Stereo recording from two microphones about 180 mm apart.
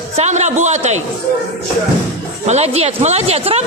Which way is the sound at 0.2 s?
40° right (ahead or behind).